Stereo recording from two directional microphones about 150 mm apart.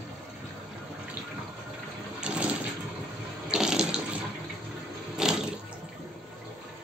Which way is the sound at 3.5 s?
5° right (ahead or behind).